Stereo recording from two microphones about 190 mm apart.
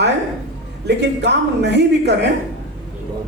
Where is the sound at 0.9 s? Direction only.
65° right (ahead or behind).